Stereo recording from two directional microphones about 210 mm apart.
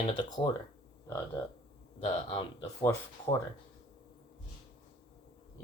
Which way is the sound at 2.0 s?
25° left (ahead or behind).